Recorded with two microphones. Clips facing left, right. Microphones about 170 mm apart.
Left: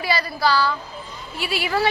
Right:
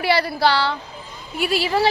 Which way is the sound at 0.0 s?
65° right (ahead or behind).